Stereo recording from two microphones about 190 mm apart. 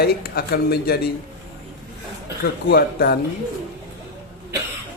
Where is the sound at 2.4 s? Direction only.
55° left (ahead or behind).